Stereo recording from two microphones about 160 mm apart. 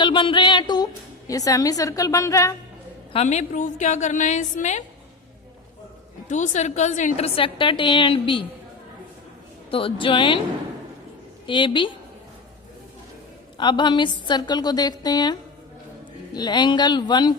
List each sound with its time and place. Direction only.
0.0 s a sound: 30° left (ahead or behind)
1.3 s a woman's voice: 20° left (ahead or behind)
3.1 s a woman's voice: 40° left (ahead or behind)
6.2 s a woman's voice: 50° left (ahead or behind); by 8.4 s 30° left (ahead or behind)
9.6 s a woman's voice: 35° left (ahead or behind)
11.4 s a woman's voice: 30° left (ahead or behind)
13.6 s a woman's voice: 30° left (ahead or behind)